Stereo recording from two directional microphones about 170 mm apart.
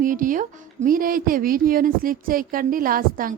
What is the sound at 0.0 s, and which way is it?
Speech, 50° right (ahead or behind).